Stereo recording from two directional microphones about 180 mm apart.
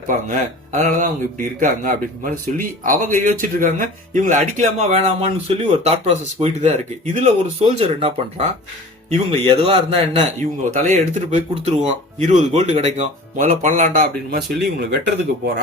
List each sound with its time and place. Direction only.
0.1 s speech: 45° right (ahead or behind)
10.7 s speech: 45° right (ahead or behind); by 14.9 s 60° right (ahead or behind)